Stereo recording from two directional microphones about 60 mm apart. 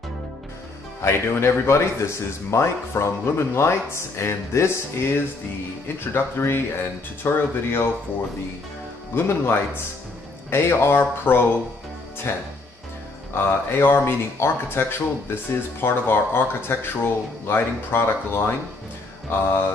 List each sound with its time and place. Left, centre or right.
1.0 s speech: left
9.1 s speech: left